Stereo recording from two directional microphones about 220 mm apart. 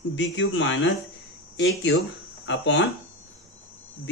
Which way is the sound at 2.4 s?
55° left (ahead or behind).